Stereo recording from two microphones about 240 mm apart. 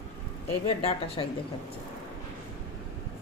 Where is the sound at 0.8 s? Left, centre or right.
Left.